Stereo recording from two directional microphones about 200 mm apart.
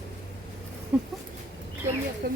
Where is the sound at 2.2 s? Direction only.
50° right (ahead or behind).